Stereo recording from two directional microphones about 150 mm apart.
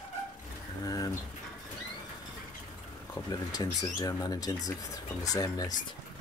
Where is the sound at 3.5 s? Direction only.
20° left (ahead or behind).